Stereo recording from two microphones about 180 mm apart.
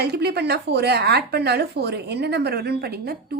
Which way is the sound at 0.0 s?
65° right (ahead or behind).